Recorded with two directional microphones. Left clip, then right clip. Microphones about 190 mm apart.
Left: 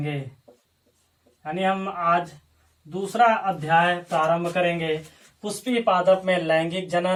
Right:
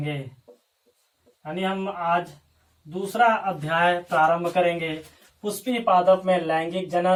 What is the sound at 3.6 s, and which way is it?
Speech, centre (ahead or behind).